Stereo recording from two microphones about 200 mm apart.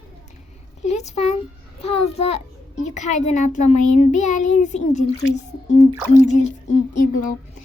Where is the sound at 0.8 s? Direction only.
35° left (ahead or behind).